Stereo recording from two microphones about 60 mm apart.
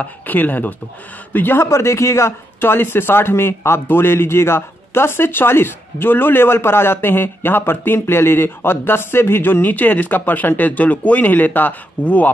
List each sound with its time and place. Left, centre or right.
0.0 s a man's voice: left
1.7 s a man's voice: left